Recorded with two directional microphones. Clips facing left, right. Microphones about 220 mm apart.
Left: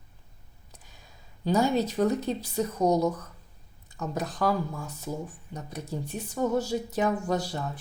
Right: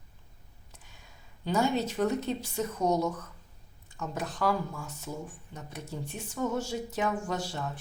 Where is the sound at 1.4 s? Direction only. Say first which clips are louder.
Left 3 dB; 35° left (ahead or behind).